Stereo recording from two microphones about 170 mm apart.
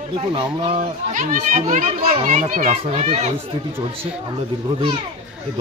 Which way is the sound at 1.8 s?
35° right (ahead or behind).